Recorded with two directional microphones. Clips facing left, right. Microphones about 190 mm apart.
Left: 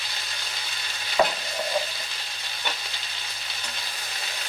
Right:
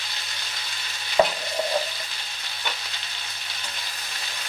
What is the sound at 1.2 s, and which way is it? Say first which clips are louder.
Stir: right 2 dB; 30° right (ahead or behind).